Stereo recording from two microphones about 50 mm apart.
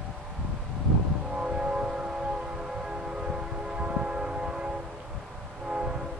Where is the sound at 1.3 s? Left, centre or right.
Centre.